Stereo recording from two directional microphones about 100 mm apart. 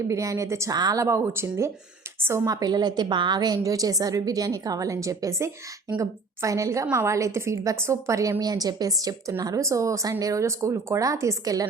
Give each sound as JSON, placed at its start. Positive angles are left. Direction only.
{"t": 0.1, "sound": "a woman's voice", "side_deg": -30}
{"t": 0.7, "sound": "a woman's voice", "side_deg": -40}